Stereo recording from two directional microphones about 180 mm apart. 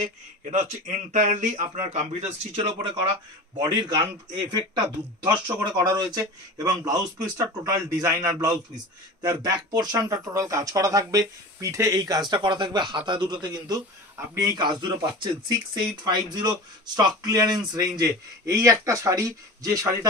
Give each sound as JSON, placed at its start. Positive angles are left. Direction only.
{"t": 0.0, "sound": "speech", "side_deg": -40}
{"t": 3.5, "sound": "speech", "side_deg": -25}